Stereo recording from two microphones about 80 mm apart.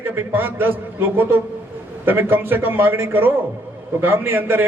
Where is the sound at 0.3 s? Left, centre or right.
Right.